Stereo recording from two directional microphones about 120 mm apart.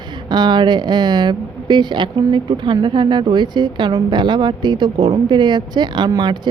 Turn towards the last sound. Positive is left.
turn(degrees=-35)  # may be behind; listen again after turning